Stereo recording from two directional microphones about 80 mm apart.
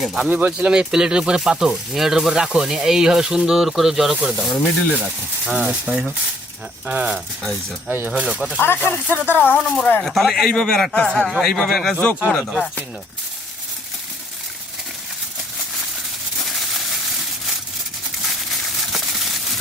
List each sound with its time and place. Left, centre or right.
0.0 s speech: centre
0.3 s speech: centre
5.5 s speech: centre
7.9 s speech: right
8.1 s speech: centre
8.5 s speech: left
10.0 s a man's voice: centre
11.3 s speech: centre
16.4 s a sound: centre
18.8 s a sound: centre